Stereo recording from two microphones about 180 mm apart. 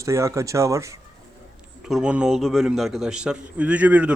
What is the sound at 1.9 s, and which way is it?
A man's voice, 5° right (ahead or behind).